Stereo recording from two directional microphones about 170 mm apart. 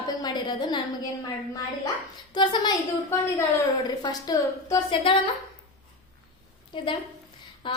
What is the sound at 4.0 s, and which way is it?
A woman's voice, 25° left (ahead or behind).